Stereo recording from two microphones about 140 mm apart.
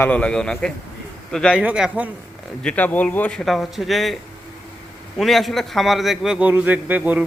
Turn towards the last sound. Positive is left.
turn(degrees=-10)  # may be behind; listen again after turning